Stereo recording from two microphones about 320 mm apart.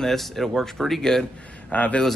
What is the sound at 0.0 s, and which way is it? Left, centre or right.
Speech, centre.